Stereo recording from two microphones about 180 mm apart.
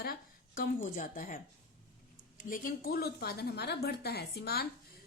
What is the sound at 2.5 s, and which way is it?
A woman's voice, 55° left (ahead or behind).